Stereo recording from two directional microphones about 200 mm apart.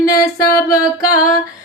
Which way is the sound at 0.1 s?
15° left (ahead or behind).